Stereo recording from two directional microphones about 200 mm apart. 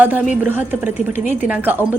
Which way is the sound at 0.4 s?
10° right (ahead or behind).